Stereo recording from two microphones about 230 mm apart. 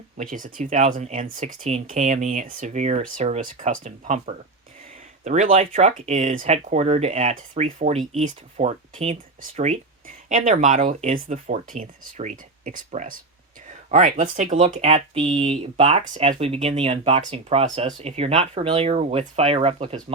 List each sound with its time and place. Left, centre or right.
0.2 s speech: right